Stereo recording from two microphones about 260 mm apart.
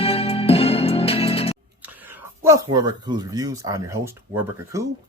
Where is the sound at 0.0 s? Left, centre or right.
Left.